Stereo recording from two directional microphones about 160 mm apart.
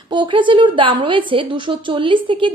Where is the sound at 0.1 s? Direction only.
30° right (ahead or behind).